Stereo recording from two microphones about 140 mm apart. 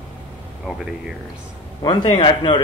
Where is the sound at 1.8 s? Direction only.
35° left (ahead or behind).